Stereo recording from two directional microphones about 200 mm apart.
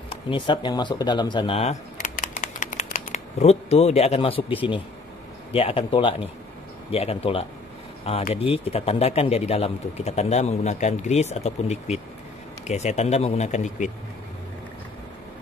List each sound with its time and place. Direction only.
0.1 s speech: 25° left (ahead or behind)